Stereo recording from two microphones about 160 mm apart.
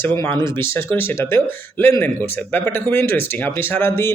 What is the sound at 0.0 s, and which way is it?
Speech, 15° left (ahead or behind).